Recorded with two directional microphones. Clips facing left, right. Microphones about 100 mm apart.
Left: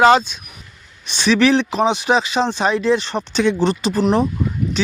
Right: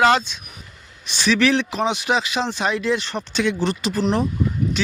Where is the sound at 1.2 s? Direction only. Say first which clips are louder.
Left 4 dB; 30° left (ahead or behind).